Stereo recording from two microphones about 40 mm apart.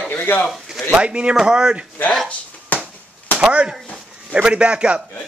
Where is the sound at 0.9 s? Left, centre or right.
Right.